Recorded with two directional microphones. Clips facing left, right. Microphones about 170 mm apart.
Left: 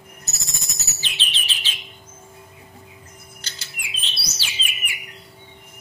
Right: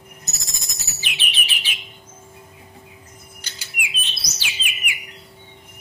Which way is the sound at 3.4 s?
10° right (ahead or behind).